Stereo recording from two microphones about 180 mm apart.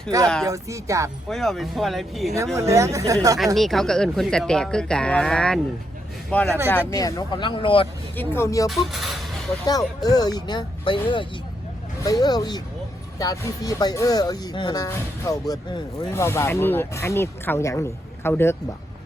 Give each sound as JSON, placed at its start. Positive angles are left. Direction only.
{"t": 0.4, "sound": "speech", "side_deg": -15}
{"t": 1.3, "sound": "speech", "side_deg": 0}
{"t": 2.6, "sound": "speech", "side_deg": -15}
{"t": 3.3, "sound": "speech", "side_deg": 0}
{"t": 8.1, "sound": "speech", "side_deg": 10}
{"t": 8.6, "sound": "speech", "side_deg": 0}
{"t": 9.6, "sound": "speech", "side_deg": 20}